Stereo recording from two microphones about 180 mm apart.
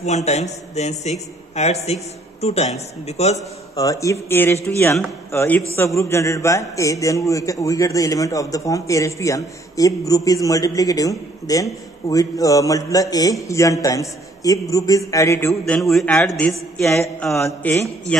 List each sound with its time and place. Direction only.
0.0 s a man's voice: 40° left (ahead or behind)
3.7 s a man's voice: 20° left (ahead or behind)
15.9 s speech: centre (ahead or behind)
17.4 s speech: 15° left (ahead or behind)